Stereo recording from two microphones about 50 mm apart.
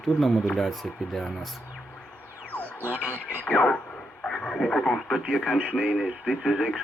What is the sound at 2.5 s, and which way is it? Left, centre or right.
Music, left.